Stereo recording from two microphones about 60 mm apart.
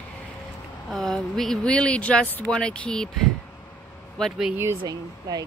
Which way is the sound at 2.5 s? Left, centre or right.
Centre.